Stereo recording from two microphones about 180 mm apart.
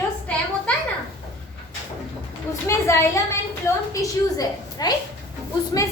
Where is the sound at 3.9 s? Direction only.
20° left (ahead or behind).